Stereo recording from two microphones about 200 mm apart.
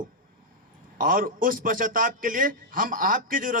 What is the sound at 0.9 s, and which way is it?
A man's voice, 45° right (ahead or behind).